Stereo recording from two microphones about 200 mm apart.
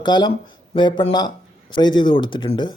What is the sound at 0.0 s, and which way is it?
Speech, 20° left (ahead or behind).